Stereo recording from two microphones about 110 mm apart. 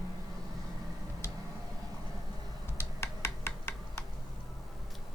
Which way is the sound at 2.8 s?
25° left (ahead or behind).